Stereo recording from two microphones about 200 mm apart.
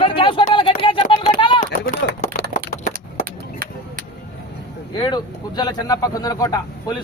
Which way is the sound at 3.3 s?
45° right (ahead or behind).